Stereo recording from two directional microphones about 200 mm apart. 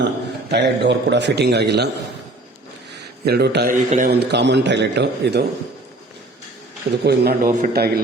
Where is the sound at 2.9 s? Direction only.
55° right (ahead or behind).